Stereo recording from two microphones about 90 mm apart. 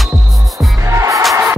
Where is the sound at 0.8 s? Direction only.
35° right (ahead or behind).